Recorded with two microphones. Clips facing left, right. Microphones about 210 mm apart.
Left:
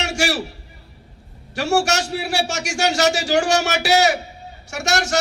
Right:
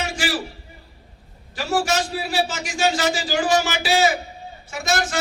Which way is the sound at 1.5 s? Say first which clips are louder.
Left 3 dB; 75° left (ahead or behind).